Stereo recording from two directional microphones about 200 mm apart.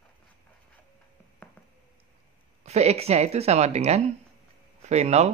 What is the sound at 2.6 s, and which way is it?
A woman's voice, 35° right (ahead or behind).